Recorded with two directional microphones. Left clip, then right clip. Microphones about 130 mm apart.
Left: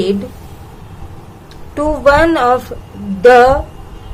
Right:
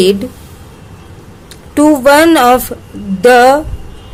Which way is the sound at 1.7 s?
60° right (ahead or behind).